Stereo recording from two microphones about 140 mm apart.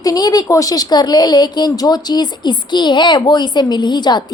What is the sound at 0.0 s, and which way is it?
A woman's voice, 25° left (ahead or behind).